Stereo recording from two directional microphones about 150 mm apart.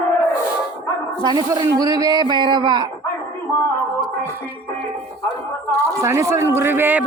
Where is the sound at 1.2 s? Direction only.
30° right (ahead or behind).